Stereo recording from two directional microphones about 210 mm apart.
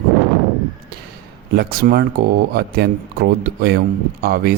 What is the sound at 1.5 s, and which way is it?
Speech, 45° right (ahead or behind).